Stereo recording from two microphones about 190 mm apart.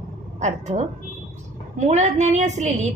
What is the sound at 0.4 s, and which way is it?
A woman's voice, 40° right (ahead or behind).